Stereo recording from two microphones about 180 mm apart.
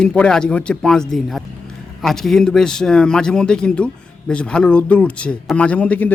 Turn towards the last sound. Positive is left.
turn(degrees=10)  # may be behind; listen again after turning